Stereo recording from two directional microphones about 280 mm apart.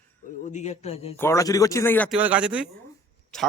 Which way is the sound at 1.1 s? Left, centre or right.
Centre.